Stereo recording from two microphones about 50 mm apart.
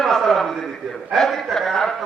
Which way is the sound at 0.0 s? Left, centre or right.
Centre.